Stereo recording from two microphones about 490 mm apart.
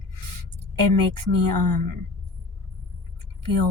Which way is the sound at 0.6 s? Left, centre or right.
Right.